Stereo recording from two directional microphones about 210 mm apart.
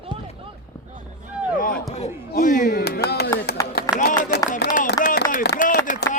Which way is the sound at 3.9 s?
40° left (ahead or behind).